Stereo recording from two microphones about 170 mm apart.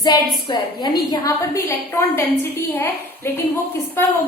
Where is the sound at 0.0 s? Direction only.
25° left (ahead or behind).